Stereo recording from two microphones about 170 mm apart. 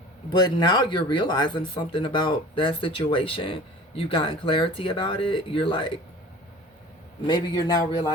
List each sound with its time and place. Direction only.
0.3 s speech: 25° left (ahead or behind)
7.3 s speech: 25° left (ahead or behind)